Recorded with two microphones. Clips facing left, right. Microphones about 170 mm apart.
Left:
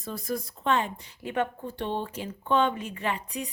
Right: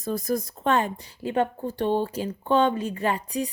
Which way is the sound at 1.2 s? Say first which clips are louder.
Right 5 dB; 35° right (ahead or behind).